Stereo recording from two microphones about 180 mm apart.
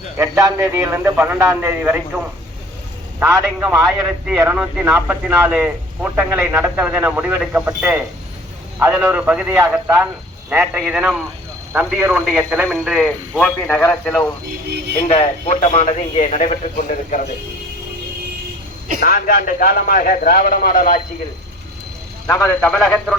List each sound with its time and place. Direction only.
0.2 s a man's voice: 15° right (ahead or behind); by 14.3 s 10° left (ahead or behind)
15.0 s a man's voice: 35° left (ahead or behind)
18.9 s a man's voice: 55° left (ahead or behind)
22.3 s a man's voice: 15° left (ahead or behind)